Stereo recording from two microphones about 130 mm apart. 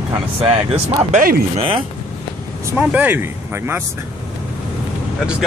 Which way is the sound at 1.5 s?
45° right (ahead or behind).